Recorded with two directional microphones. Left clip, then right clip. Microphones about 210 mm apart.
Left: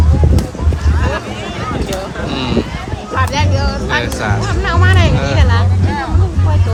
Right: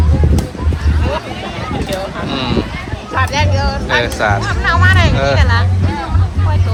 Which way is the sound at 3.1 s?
50° left (ahead or behind).